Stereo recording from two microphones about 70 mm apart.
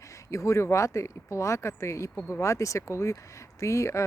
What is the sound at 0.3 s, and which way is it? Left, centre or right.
Speech, left.